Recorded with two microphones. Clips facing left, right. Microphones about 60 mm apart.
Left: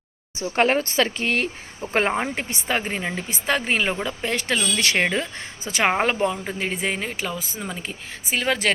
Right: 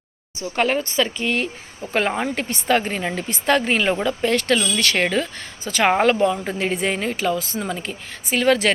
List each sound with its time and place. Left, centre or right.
0.5 s speech: left
1.9 s speech: left
2.2 s speech: centre
6.3 s a woman's voice: centre